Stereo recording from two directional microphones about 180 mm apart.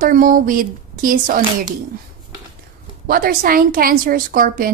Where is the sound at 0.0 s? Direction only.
50° right (ahead or behind).